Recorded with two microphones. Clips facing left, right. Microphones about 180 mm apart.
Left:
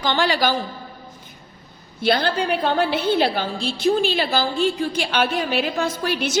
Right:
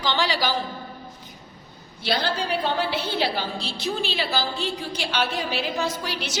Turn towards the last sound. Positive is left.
turn(degrees=50)  # may be behind; listen again after turning